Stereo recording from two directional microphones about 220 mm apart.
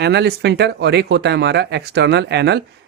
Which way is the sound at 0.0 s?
50° right (ahead or behind).